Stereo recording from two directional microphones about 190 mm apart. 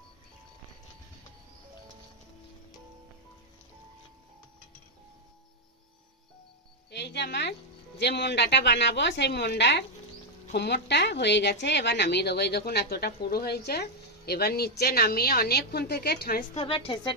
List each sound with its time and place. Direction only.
6.9 s speech: 65° left (ahead or behind)
16.5 s a woman's voice: 30° left (ahead or behind)